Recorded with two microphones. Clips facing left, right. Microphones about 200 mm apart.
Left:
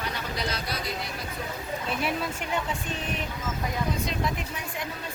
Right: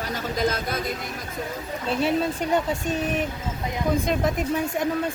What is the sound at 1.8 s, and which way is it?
Speech, 30° right (ahead or behind).